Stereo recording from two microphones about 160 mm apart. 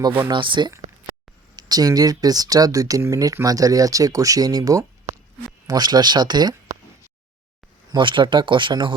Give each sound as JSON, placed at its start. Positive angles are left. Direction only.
{"t": 0.3, "sound": "speech", "side_deg": -30}
{"t": 7.9, "sound": "speech", "side_deg": -30}